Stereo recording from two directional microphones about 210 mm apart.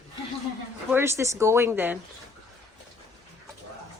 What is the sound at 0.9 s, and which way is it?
Speech, 10° right (ahead or behind).